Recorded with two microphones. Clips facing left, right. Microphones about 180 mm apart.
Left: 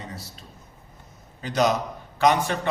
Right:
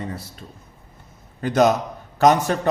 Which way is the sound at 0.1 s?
55° right (ahead or behind).